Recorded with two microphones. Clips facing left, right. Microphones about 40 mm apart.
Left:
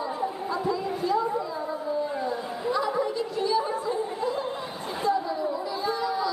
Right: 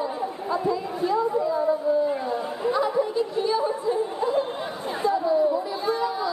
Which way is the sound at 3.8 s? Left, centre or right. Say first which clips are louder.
Right 3 dB; right.